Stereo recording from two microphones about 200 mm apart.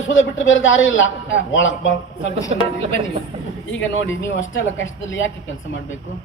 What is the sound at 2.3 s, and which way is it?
Speech, 15° left (ahead or behind).